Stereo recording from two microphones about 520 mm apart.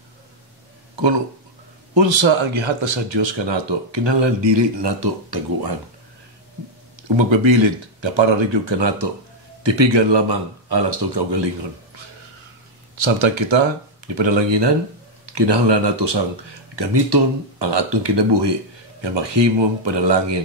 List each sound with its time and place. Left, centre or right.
2.0 s speech: right
7.0 s speech: right
12.9 s speech: right